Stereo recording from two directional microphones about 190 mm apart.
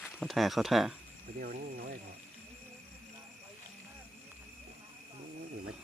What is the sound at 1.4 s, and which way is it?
Speech, 50° right (ahead or behind).